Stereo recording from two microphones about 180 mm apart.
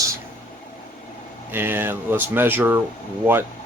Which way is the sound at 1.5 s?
10° right (ahead or behind).